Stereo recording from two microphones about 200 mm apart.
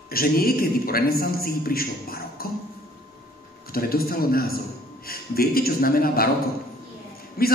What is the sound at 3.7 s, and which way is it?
A man's voice, 50° left (ahead or behind).